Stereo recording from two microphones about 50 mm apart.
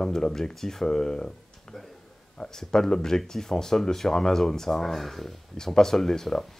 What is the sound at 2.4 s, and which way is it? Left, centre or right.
Speech, centre.